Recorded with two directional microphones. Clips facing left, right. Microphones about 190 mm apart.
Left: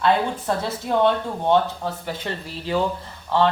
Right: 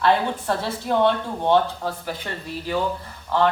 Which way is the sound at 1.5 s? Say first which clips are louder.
Even; 25° left (ahead or behind).